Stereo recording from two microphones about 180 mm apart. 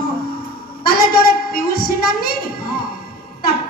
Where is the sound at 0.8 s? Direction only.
55° left (ahead or behind).